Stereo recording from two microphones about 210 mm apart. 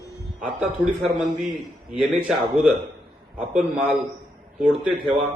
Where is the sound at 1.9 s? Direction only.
Centre (ahead or behind).